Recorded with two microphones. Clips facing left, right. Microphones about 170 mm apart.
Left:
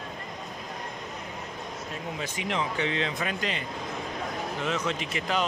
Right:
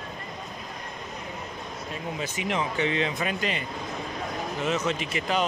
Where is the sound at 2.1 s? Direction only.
5° right (ahead or behind).